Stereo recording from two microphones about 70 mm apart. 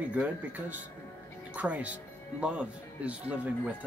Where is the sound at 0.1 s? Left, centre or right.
Right.